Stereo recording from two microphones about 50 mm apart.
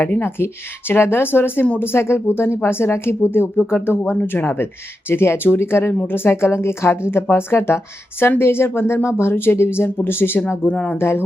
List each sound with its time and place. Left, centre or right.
0.0 s speech: left
3.8 s speech: left
4.3 s a woman's voice: left
10.7 s speech: left
10.9 s a woman's voice: left